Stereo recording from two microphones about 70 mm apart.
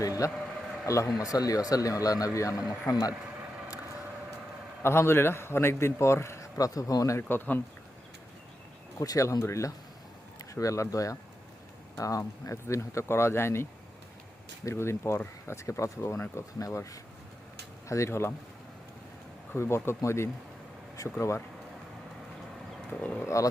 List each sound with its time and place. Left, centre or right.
0.2 s speech: left
2.8 s speech: left
4.8 s a man's voice: left
7.2 s a man's voice: left
9.0 s a man's voice: left
19.5 s a man's voice: left
22.9 s speech: centre
23.2 s speech: left